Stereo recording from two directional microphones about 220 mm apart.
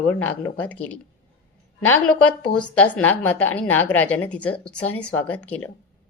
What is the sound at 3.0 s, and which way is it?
A woman's voice, 5° left (ahead or behind).